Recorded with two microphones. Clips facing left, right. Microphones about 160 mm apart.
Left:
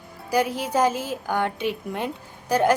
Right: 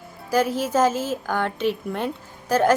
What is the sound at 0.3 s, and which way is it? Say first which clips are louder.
Speech: right 2 dB; 15° left (ahead or behind).